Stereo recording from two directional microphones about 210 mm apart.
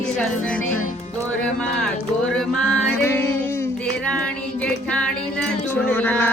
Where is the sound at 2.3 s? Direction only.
5° left (ahead or behind).